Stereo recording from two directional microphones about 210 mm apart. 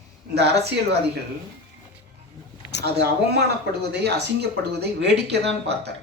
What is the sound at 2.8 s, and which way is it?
Speech, 50° right (ahead or behind).